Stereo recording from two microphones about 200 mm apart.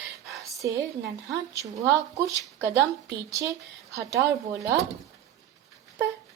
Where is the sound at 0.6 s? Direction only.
15° right (ahead or behind).